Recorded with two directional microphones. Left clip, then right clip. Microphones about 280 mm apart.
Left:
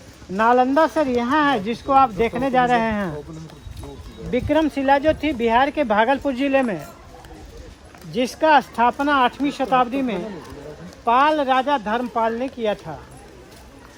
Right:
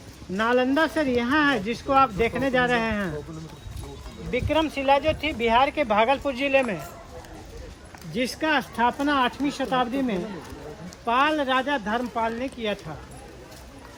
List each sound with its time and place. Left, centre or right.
0.3 s speech: left
4.3 s speech: left
8.1 s speech: left